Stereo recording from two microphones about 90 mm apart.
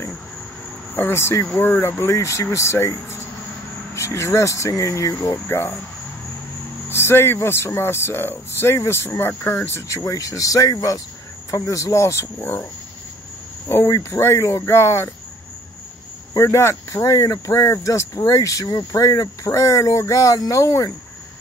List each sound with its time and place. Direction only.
0.9 s speech: 25° left (ahead or behind)
6.9 s speech: 30° left (ahead or behind)
10.0 s speech: 40° left (ahead or behind); by 12.6 s 25° left (ahead or behind)
13.7 s speech: 30° left (ahead or behind)
16.3 s speech: 35° left (ahead or behind)